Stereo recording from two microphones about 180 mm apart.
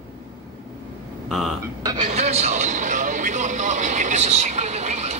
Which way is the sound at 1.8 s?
20° right (ahead or behind).